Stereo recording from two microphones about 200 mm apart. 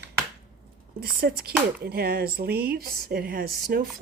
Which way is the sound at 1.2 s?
55° right (ahead or behind).